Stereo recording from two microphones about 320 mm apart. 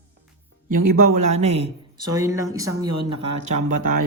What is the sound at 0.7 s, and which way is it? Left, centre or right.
Speech, right.